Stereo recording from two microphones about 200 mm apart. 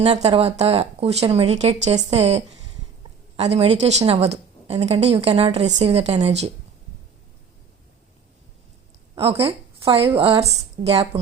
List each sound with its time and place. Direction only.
0.0 s a woman's voice: 30° right (ahead or behind)
9.1 s a woman's voice: 30° right (ahead or behind)